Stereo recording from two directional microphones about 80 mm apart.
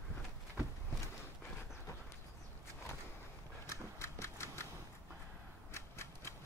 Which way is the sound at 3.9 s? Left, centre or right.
Left.